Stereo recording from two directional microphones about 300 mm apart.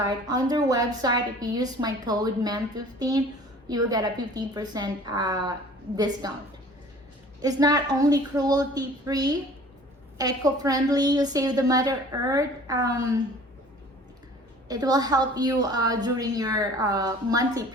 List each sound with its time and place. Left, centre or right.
0.1 s a woman's voice: centre
7.4 s a woman's voice: centre
14.7 s a woman's voice: centre